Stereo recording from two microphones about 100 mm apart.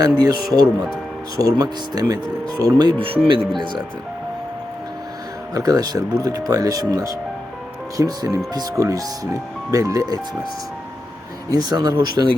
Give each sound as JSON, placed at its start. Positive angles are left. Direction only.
{"t": 0.0, "sound": "speech", "side_deg": -40}
{"t": 3.0, "sound": "speech", "side_deg": -60}
{"t": 5.5, "sound": "speech", "side_deg": -35}
{"t": 11.4, "sound": "speech", "side_deg": -40}